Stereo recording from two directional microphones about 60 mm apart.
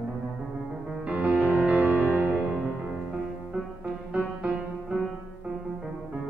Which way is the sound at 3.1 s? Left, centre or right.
Centre.